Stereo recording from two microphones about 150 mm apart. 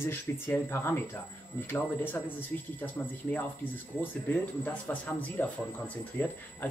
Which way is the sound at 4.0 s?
10° left (ahead or behind).